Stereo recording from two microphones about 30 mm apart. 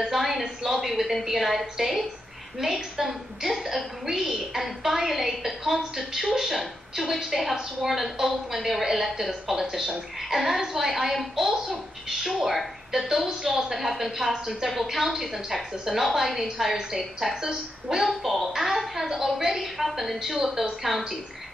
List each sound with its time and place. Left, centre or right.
0.0 s a woman's voice: centre
17.8 s a woman's voice: centre